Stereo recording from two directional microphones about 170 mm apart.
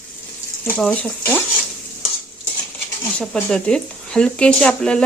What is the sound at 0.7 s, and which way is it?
Speech, 5° left (ahead or behind).